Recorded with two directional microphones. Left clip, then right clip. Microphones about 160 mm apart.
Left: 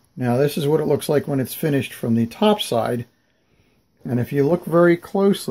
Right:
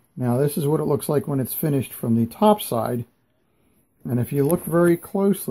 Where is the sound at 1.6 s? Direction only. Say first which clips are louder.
Left 3 dB; 15° right (ahead or behind).